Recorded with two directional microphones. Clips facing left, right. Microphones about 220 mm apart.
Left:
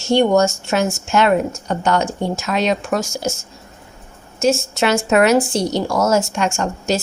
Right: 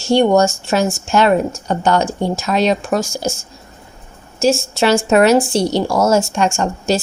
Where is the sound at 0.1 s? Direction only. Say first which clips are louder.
Right 2 dB; 35° right (ahead or behind).